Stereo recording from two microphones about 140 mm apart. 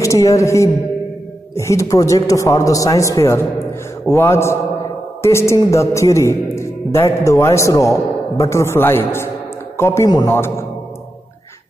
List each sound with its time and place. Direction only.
0.0 s a man's voice: 20° left (ahead or behind)